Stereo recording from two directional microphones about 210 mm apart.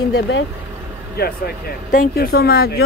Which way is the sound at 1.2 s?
50° left (ahead or behind).